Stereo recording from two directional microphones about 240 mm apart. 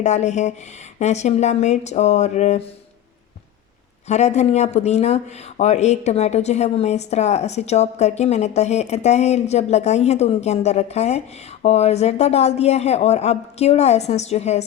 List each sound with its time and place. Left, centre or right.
0.0 s speech: left
4.1 s speech: left